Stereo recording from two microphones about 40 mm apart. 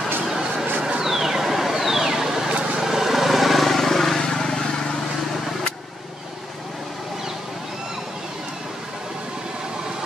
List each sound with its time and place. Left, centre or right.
0.3 s chatter: centre
1.0 s a sound: centre
2.8 s vehicle: centre